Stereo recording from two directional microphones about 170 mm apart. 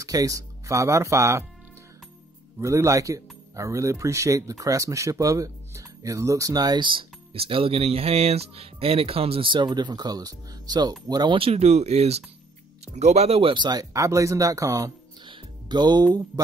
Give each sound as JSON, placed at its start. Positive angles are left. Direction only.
{"t": 0.0, "sound": "speech", "side_deg": -20}
{"t": 2.6, "sound": "speech", "side_deg": -15}